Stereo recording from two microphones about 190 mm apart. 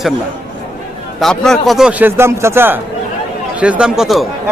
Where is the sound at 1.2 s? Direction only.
Centre (ahead or behind).